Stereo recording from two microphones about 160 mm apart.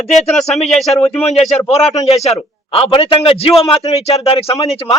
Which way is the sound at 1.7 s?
45° left (ahead or behind).